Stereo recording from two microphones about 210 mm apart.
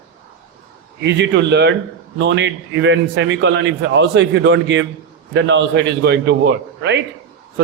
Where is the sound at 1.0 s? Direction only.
55° right (ahead or behind).